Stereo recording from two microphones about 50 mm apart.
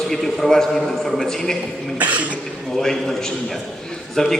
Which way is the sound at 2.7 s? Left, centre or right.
Centre.